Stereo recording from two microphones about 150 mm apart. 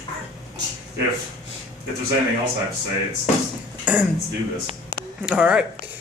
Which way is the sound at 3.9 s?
10° right (ahead or behind).